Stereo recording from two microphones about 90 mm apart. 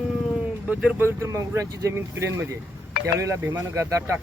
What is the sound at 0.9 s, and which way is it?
Speech, 30° right (ahead or behind).